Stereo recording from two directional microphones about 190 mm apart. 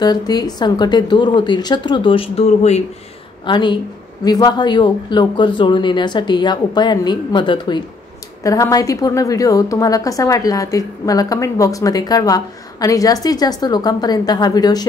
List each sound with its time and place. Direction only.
0.0 s a woman's voice: 20° left (ahead or behind)
3.4 s a woman's voice: 25° left (ahead or behind)